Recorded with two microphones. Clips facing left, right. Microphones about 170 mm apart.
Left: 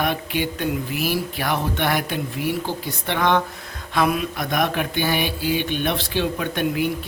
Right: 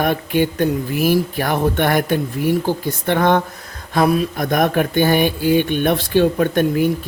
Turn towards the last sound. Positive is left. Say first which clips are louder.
# right 7 dB
turn(degrees=-45)  # may be behind; listen again after turning